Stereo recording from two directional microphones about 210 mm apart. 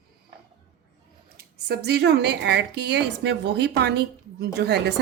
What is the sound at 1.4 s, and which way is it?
A woman's voice, 50° right (ahead or behind).